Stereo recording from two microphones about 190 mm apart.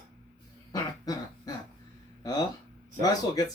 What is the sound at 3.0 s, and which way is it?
Speech, 20° left (ahead or behind).